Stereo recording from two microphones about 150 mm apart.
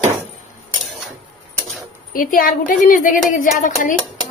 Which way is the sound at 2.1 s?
70° left (ahead or behind).